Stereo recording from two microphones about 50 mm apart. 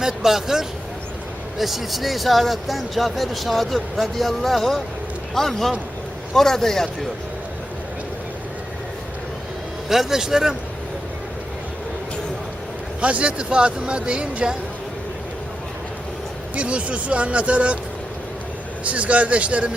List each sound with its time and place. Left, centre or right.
0.0 s a man's voice: centre
9.9 s a man's voice: centre
13.0 s speech: right
16.6 s speech: right
18.9 s speech: right